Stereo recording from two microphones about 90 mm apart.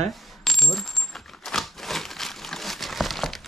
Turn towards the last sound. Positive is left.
turn(degrees=0)  # may be behind; listen again after turning